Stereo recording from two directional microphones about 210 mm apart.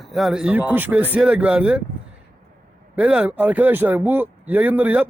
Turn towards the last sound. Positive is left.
turn(degrees=-5)  # may be behind; listen again after turning